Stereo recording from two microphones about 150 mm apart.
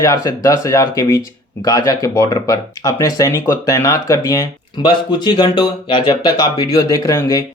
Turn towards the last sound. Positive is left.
turn(degrees=20)  # may be behind; listen again after turning